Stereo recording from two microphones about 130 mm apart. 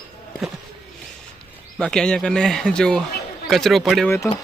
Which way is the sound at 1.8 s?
5° left (ahead or behind).